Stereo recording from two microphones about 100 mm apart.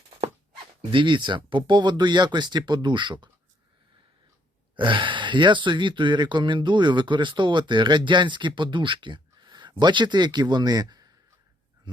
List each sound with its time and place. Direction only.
0.9 s speech: 55° right (ahead or behind)
4.8 s speech: 55° right (ahead or behind)